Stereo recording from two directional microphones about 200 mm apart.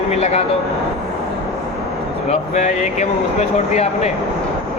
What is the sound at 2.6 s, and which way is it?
Speech, 35° left (ahead or behind).